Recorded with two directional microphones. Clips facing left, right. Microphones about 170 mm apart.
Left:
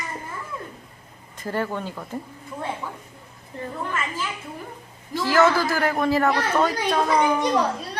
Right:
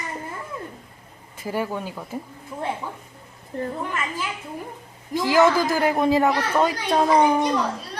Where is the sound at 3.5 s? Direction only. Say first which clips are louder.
Right 5 dB; 55° right (ahead or behind).